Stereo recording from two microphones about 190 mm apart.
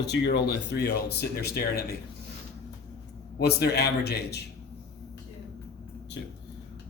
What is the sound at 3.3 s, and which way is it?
Speech, 55° left (ahead or behind).